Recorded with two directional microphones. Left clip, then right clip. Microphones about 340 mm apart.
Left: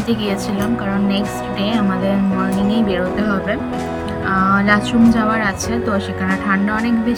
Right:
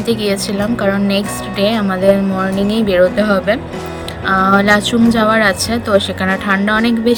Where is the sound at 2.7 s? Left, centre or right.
Centre.